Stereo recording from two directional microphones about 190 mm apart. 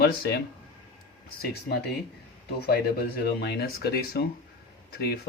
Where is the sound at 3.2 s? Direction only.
60° left (ahead or behind).